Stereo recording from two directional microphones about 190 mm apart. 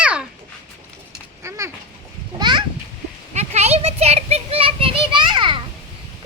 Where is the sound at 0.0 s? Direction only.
5° right (ahead or behind).